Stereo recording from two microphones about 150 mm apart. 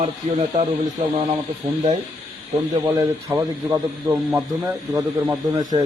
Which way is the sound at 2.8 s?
15° right (ahead or behind).